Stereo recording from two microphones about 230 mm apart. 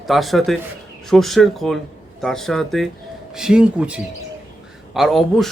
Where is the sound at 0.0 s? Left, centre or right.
Centre.